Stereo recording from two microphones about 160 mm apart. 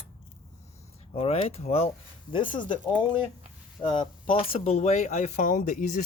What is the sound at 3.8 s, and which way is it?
Speech, 30° left (ahead or behind).